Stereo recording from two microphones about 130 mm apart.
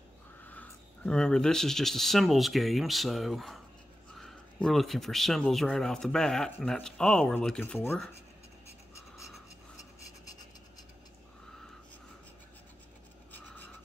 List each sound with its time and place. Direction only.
0.4 s speech: 10° left (ahead or behind)
8.9 s writing: 20° left (ahead or behind)